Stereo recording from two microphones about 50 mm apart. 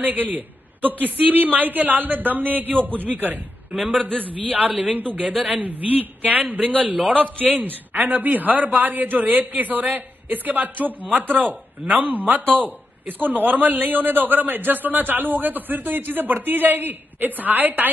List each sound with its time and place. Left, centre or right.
0.0 s a man's voice: right